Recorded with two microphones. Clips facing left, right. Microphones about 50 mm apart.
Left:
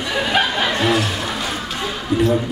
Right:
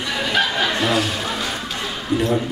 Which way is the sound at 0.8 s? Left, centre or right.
Centre.